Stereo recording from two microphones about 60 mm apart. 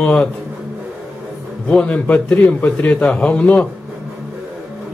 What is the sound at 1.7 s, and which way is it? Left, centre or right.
A man's voice, left.